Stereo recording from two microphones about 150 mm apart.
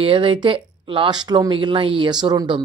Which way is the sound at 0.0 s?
35° right (ahead or behind).